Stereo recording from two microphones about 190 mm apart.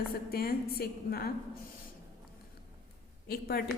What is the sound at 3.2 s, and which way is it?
Speech, 55° left (ahead or behind).